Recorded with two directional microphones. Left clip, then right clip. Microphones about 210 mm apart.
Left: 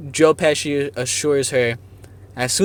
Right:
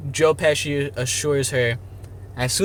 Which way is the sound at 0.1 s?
35° left (ahead or behind).